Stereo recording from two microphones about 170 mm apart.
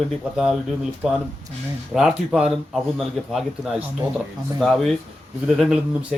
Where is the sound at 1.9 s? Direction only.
5° right (ahead or behind).